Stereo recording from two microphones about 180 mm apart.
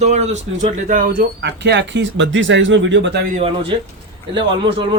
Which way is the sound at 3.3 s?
30° right (ahead or behind).